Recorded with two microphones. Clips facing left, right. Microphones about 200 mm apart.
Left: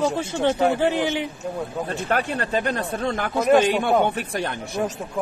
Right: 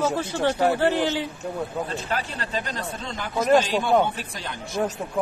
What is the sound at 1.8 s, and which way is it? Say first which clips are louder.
Speech: left 5 dB; 60° left (ahead or behind).